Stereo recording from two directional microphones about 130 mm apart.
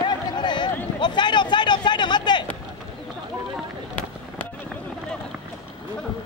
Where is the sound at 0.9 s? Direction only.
35° left (ahead or behind).